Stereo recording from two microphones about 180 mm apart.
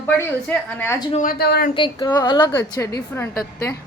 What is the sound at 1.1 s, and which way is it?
Speech, 50° left (ahead or behind).